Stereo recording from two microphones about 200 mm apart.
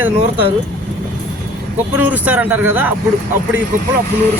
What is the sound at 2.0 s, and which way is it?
Speech, 10° right (ahead or behind).